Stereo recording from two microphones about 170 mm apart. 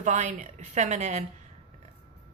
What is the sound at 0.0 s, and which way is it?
A woman's voice, 45° right (ahead or behind).